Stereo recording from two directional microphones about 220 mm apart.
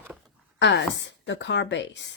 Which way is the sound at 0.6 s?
55° left (ahead or behind).